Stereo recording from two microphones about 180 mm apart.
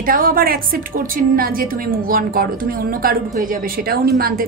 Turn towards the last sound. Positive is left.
turn(degrees=-55)  # may be behind; listen again after turning